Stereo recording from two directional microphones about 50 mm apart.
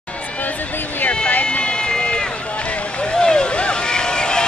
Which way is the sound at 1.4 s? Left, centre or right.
Left.